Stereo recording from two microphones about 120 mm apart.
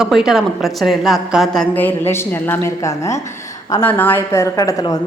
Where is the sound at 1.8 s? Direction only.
15° left (ahead or behind).